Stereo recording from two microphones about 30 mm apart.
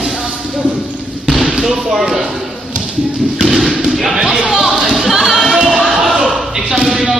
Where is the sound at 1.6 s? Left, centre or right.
Centre.